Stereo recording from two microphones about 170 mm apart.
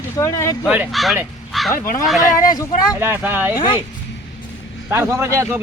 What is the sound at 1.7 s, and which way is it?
Speech, 55° left (ahead or behind).